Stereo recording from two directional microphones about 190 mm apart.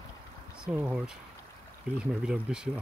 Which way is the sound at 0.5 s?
5° right (ahead or behind).